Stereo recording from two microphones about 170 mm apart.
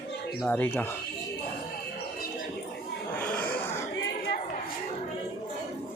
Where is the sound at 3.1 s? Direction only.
10° left (ahead or behind).